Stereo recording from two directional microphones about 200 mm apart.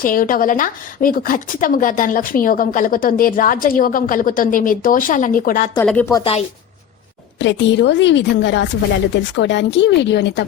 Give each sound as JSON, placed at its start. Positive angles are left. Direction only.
{"t": 0.0, "sound": "speech", "side_deg": 45}
{"t": 5.7, "sound": "a woman's voice", "side_deg": 10}
{"t": 7.3, "sound": "a woman's voice", "side_deg": 65}